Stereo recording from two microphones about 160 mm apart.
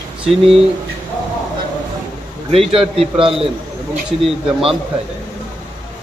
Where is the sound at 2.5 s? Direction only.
35° right (ahead or behind).